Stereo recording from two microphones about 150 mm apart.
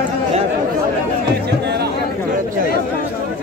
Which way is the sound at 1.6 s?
90° right.